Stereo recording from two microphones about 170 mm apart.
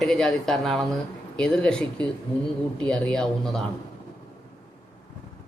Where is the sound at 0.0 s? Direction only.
Centre (ahead or behind).